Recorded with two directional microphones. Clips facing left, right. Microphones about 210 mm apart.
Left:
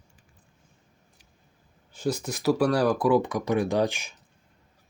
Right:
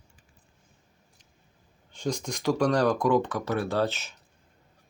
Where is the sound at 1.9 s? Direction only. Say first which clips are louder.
Left 2 dB; 5° left (ahead or behind).